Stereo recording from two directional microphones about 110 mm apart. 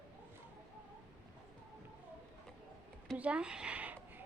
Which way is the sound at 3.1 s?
10° right (ahead or behind).